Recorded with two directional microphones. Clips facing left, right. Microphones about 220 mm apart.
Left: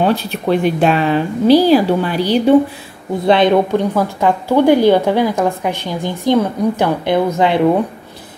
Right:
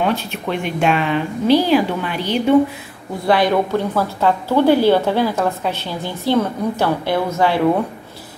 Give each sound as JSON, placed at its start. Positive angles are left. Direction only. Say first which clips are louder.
{"t": 0.0, "sound": "a woman's voice", "louder": "left 4 dB", "side_deg": 35}
{"t": 3.3, "sound": "a woman's voice", "louder": "left 4 dB", "side_deg": 20}